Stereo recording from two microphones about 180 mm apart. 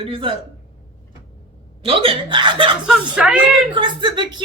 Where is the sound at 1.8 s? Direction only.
30° right (ahead or behind).